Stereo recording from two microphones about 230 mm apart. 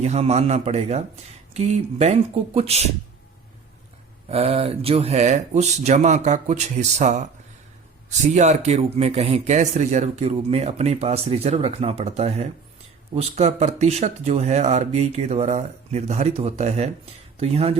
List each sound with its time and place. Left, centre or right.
0.0 s speech: right
4.3 s speech: right